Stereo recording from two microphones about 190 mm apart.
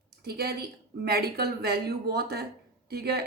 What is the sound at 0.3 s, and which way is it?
Speech, 55° right (ahead or behind).